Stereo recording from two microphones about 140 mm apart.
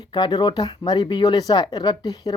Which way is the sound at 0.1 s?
30° left (ahead or behind).